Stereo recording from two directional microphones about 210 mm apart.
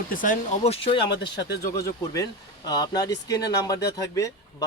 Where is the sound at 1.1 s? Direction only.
55° left (ahead or behind).